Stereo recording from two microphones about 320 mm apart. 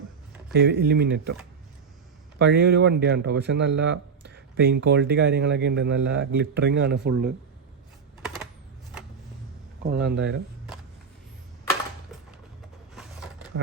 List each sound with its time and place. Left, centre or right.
0.5 s a man's voice: right
2.4 s a man's voice: right
9.8 s a man's voice: right